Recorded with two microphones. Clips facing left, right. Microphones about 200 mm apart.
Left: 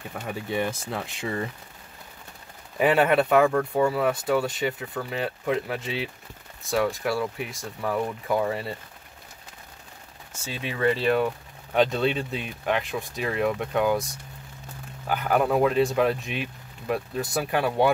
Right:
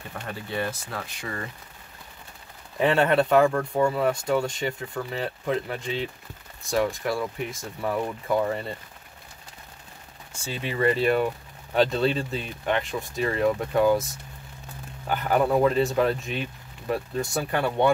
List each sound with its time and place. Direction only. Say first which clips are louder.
0.1 s speech: left 3 dB; 10° left (ahead or behind)
2.8 s speech: left 1 dB; 5° left (ahead or behind)
10.3 s speech: right 2 dB; 5° right (ahead or behind)